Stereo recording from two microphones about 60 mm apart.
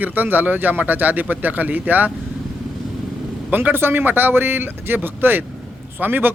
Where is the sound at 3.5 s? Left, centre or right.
Right.